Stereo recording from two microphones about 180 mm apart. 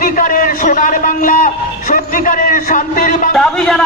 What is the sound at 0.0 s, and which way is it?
A man's voice, 50° left (ahead or behind).